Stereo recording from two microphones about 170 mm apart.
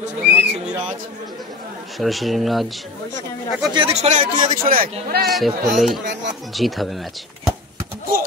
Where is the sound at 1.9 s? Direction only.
Centre (ahead or behind).